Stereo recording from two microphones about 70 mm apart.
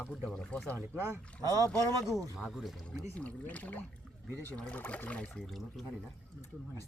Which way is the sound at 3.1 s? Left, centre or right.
Left.